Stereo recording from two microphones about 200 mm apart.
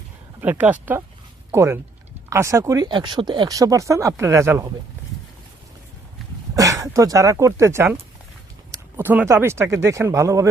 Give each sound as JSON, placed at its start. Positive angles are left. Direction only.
{"t": 0.4, "sound": "speech", "side_deg": -10}
{"t": 6.6, "sound": "speech", "side_deg": -15}
{"t": 9.0, "sound": "speech", "side_deg": -10}